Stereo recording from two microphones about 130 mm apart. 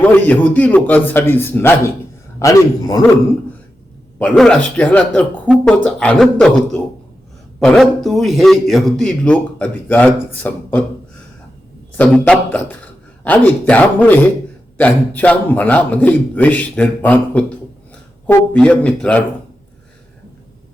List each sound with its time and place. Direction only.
0.0 s a man's voice: 15° left (ahead or behind)
2.4 s a man's voice: 25° left (ahead or behind)
4.2 s a man's voice: 5° left (ahead or behind)
11.9 s a man's voice: 10° left (ahead or behind)
18.5 s a man's voice: 5° left (ahead or behind)